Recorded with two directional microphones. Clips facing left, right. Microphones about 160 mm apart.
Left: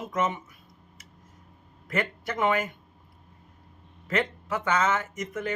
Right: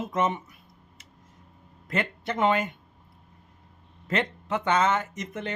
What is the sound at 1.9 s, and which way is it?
Speech, 25° right (ahead or behind).